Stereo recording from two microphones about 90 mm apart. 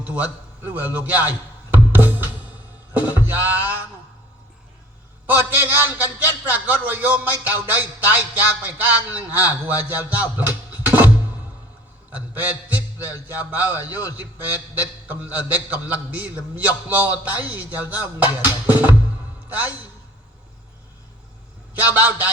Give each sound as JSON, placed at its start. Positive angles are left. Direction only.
{"t": 0.0, "sound": "a man's voice", "side_deg": -15}
{"t": 1.7, "sound": "music", "side_deg": -20}
{"t": 5.2, "sound": "a man's voice", "side_deg": -20}
{"t": 10.8, "sound": "music", "side_deg": -20}
{"t": 12.1, "sound": "a man's voice", "side_deg": -15}
{"t": 21.8, "sound": "a man's voice", "side_deg": -20}